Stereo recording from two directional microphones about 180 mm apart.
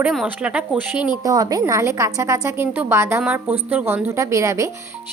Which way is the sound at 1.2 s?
20° right (ahead or behind).